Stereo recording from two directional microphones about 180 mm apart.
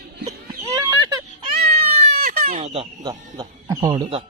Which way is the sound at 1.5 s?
35° right (ahead or behind).